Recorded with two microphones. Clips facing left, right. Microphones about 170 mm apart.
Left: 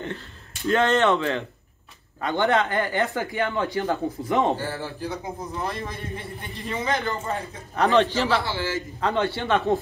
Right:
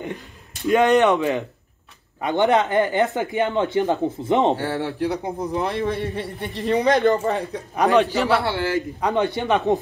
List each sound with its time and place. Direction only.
0.0 s a sound: 15° right (ahead or behind)
2.2 s speech: 20° right (ahead or behind)
4.6 s a man's voice: 70° right (ahead or behind)
7.7 s speech: 10° right (ahead or behind)
8.4 s a man's voice: 65° right (ahead or behind)
9.0 s speech: 15° right (ahead or behind)